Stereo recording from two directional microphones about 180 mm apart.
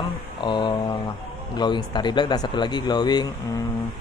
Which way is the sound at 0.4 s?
25° left (ahead or behind).